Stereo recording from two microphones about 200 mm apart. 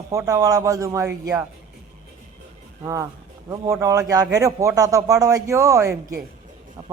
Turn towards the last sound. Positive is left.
turn(degrees=-10)  # may be behind; listen again after turning